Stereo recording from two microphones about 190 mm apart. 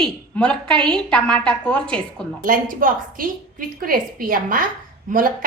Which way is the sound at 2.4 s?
45° right (ahead or behind).